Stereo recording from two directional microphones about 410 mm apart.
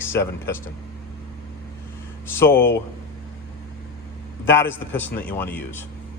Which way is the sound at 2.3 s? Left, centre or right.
Centre.